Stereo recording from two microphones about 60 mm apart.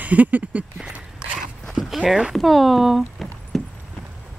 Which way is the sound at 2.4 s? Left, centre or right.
Centre.